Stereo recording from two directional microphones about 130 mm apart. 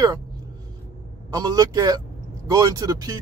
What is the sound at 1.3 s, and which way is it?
Speech, 30° right (ahead or behind).